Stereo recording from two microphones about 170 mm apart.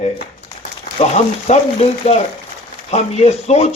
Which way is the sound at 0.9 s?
40° left (ahead or behind).